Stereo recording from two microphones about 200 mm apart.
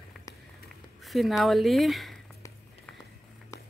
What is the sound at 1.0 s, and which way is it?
A woman's voice, centre (ahead or behind).